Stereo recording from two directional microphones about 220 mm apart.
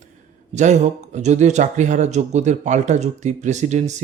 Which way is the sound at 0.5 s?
30° right (ahead or behind).